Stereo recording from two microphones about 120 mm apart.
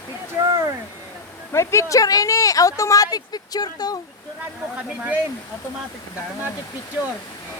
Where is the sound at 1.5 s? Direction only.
25° left (ahead or behind).